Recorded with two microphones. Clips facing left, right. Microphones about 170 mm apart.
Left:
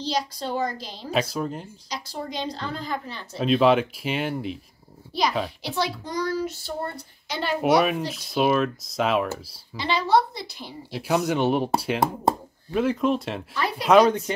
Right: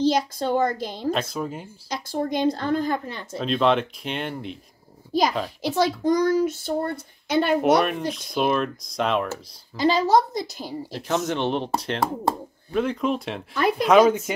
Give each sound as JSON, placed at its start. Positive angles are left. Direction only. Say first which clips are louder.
{"t": 0.0, "sound": "a woman's voice", "louder": "right 6 dB", "side_deg": -50}
{"t": 1.1, "sound": "speech", "louder": "left 2 dB", "side_deg": 5}
{"t": 1.9, "sound": "a woman's voice", "louder": "right 7 dB", "side_deg": -50}
{"t": 3.3, "sound": "speech", "louder": "left 2 dB", "side_deg": 5}
{"t": 5.1, "sound": "a woman's voice", "louder": "right 2 dB", "side_deg": -45}
{"t": 8.1, "sound": "speech", "louder": "left 1 dB", "side_deg": 5}
{"t": 9.8, "sound": "a woman's voice", "louder": "right 3 dB", "side_deg": -45}
{"t": 10.9, "sound": "speech", "louder": "left 2 dB", "side_deg": 5}
{"t": 13.6, "sound": "a woman's voice", "louder": "right 7 dB", "side_deg": -50}
{"t": 13.8, "sound": "speech", "louder": "even", "side_deg": 0}